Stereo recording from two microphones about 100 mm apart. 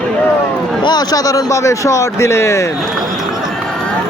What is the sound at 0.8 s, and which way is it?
Speech, 40° left (ahead or behind).